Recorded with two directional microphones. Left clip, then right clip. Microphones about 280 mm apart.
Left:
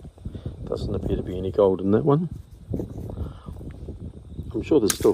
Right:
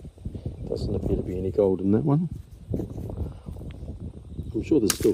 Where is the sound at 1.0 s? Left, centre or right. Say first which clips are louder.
Even; centre.